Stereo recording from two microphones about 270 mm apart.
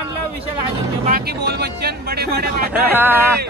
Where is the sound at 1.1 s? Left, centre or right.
Right.